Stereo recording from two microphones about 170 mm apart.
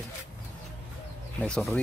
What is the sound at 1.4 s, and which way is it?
Speech, 5° left (ahead or behind).